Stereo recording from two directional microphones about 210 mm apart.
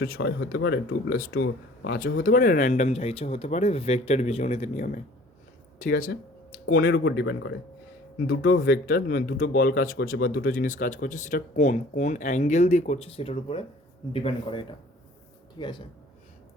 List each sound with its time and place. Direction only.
0.0 s speech: 45° left (ahead or behind)
1.3 s speech: 75° left (ahead or behind)
1.9 s speech: 45° left (ahead or behind)
7.0 s speech: 60° left (ahead or behind)
8.6 s speech: 45° left (ahead or behind); by 15.9 s 20° left (ahead or behind)